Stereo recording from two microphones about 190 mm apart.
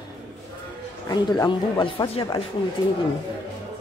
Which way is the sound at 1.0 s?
20° left (ahead or behind).